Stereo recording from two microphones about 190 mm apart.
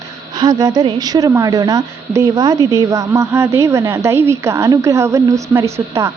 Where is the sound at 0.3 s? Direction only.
20° right (ahead or behind).